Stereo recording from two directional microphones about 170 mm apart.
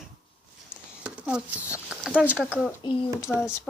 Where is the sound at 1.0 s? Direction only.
5° right (ahead or behind).